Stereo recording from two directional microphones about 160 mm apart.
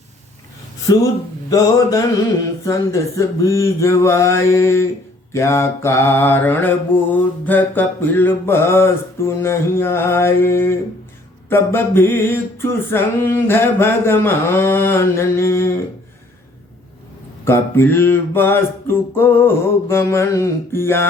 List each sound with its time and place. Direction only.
1.5 s mantra: 20° left (ahead or behind)
17.4 s mantra: 15° left (ahead or behind)